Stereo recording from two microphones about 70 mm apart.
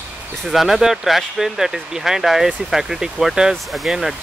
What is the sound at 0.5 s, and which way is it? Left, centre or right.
Speech, centre.